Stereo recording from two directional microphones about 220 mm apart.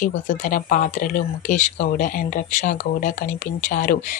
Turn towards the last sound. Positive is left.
turn(degrees=40)  # may be behind; listen again after turning